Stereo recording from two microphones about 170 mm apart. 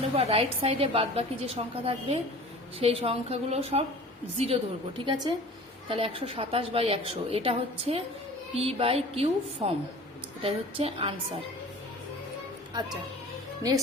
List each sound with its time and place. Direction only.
0.0 s a woman's voice: 35° right (ahead or behind)